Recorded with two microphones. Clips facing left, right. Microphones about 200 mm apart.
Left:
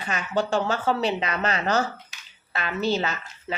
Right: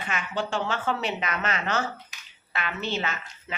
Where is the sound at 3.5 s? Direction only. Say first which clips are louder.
Left 5 dB; 40° left (ahead or behind).